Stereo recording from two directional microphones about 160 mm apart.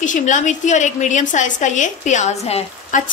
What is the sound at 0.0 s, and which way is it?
A woman's voice, 50° left (ahead or behind).